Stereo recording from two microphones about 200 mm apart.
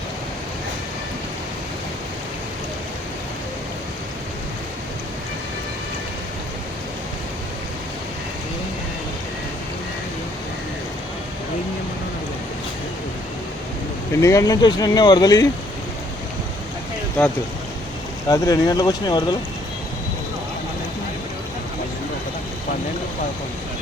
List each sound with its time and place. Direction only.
14.2 s speech: 15° left (ahead or behind)
18.3 s speech: 15° left (ahead or behind)